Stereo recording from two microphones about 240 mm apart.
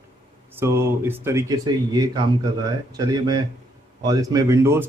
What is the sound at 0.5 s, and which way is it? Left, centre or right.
Speech, centre.